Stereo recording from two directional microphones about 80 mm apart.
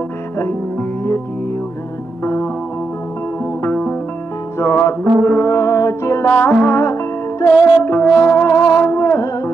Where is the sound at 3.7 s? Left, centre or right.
Centre.